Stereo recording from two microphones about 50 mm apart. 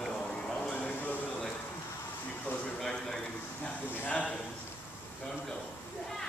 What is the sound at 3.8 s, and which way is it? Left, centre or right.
Speech, left.